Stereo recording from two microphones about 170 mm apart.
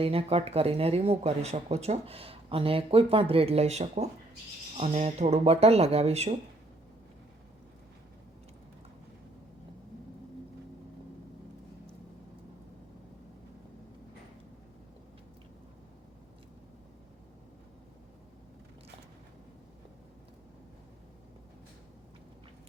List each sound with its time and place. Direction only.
0.0 s speech: 35° right (ahead or behind)